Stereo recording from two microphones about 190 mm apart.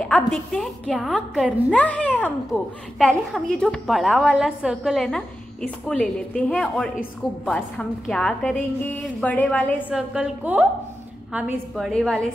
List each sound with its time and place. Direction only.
0.0 s a woman's voice: 5° left (ahead or behind)
9.8 s a woman's voice: 5° right (ahead or behind)